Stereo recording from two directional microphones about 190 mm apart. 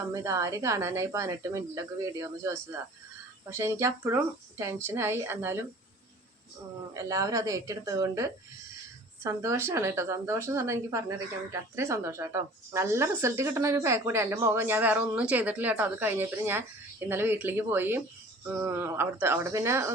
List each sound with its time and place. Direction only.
0.1 s a woman's voice: 15° right (ahead or behind)
6.9 s a woman's voice: 15° right (ahead or behind)